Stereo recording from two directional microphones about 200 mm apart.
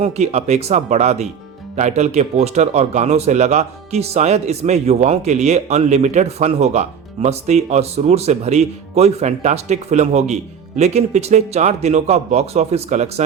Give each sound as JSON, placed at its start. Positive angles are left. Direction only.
{"t": 0.0, "sound": "speech", "side_deg": -30}